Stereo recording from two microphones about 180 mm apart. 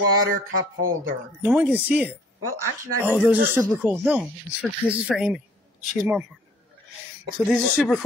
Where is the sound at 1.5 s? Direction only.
10° right (ahead or behind).